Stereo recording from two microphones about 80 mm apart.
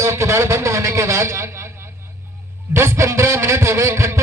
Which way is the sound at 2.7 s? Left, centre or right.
Right.